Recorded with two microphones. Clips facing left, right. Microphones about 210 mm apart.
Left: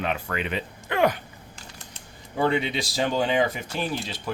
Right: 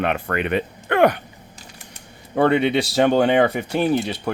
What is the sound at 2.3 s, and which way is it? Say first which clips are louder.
Speech: right 7 dB; 60° right (ahead or behind).